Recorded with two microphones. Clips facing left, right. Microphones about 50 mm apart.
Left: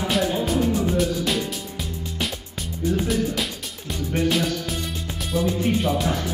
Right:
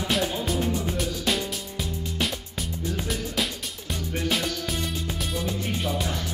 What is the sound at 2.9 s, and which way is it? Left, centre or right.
Music, centre.